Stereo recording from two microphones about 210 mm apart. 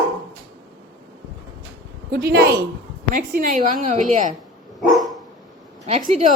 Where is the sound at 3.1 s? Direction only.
40° right (ahead or behind).